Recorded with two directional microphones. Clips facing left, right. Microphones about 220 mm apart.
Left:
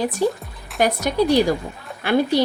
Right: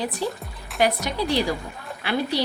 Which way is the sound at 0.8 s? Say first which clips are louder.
Left 4 dB; 45° left (ahead or behind).